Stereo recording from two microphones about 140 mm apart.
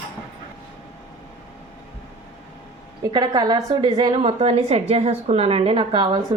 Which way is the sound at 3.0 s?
30° right (ahead or behind).